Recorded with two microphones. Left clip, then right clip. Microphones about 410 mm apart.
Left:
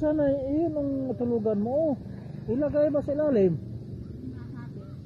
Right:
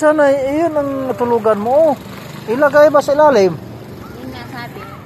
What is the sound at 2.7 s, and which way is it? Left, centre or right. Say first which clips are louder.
Speech: right 16 dB; centre.